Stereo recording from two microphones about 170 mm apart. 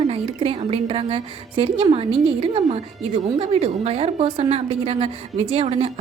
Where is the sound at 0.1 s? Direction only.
35° right (ahead or behind).